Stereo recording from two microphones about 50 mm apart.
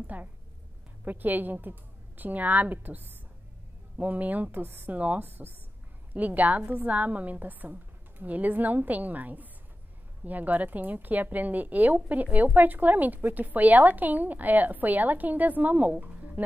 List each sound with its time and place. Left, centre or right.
0.0 s a woman's voice: right
4.9 s a woman's voice: right